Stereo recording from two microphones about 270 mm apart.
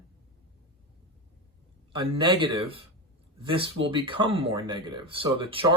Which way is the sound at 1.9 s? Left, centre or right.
Centre.